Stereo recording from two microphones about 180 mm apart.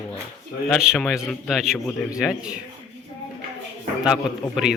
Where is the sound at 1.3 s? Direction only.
Centre (ahead or behind).